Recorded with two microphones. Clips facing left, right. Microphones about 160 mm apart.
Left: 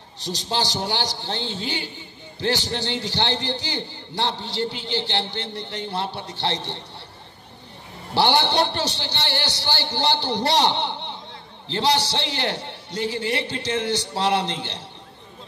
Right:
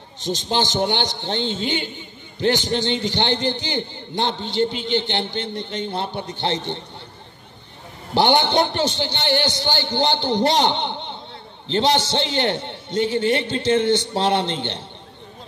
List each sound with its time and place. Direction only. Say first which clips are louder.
0.2 s a man's voice: right 4 dB; 20° right (ahead or behind)
8.1 s a man's voice: right 3 dB; 20° right (ahead or behind)